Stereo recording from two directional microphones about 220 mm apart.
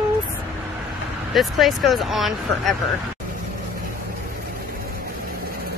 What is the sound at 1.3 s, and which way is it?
Speech, centre (ahead or behind).